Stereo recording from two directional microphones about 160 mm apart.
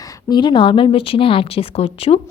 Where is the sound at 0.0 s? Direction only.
25° left (ahead or behind).